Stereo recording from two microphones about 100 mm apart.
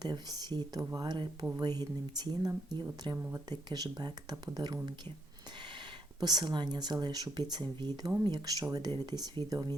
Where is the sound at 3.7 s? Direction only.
45° right (ahead or behind).